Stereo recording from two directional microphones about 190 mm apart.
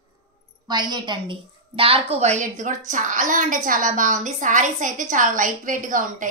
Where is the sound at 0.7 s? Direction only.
20° right (ahead or behind).